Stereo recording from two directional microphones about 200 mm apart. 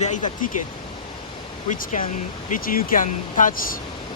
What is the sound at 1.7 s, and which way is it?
Speech, 40° left (ahead or behind).